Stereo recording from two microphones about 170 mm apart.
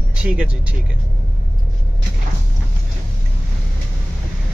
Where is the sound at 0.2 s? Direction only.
5° right (ahead or behind).